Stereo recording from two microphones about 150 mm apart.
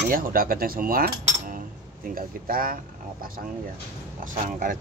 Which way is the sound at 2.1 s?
70° right (ahead or behind).